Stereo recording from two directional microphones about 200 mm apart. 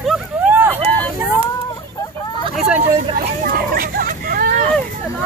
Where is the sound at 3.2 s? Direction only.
45° right (ahead or behind).